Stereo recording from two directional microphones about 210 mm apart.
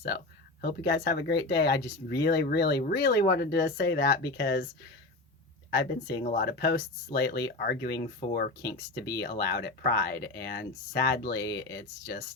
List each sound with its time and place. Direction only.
0.6 s speech: 50° left (ahead or behind)
5.7 s speech: 50° left (ahead or behind)